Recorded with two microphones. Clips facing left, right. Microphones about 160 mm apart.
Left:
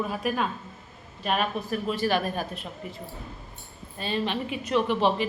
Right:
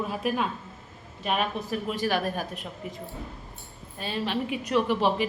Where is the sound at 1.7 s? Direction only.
15° right (ahead or behind).